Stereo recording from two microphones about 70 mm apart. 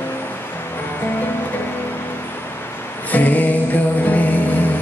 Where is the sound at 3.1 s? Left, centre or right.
Left.